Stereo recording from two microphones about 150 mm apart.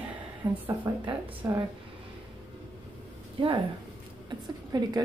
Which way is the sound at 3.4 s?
35° right (ahead or behind).